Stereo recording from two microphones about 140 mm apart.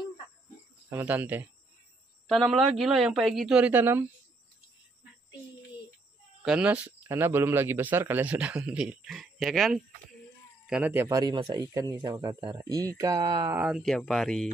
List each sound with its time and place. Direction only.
0.8 s a man's voice: 15° right (ahead or behind)
2.2 s speech: centre (ahead or behind)
6.4 s a man's voice: 5° right (ahead or behind)
10.7 s a man's voice: 10° right (ahead or behind)
13.7 s speech: centre (ahead or behind)